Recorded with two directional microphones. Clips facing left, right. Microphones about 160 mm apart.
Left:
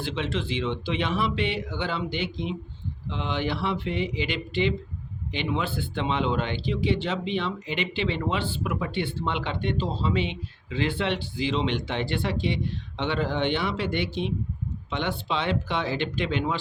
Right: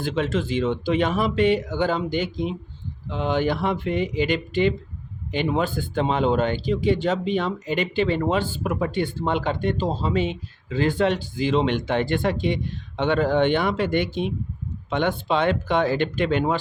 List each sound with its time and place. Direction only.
0.0 s speech: 45° right (ahead or behind)